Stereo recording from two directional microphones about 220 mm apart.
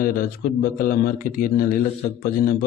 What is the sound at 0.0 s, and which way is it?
Speech, 40° left (ahead or behind).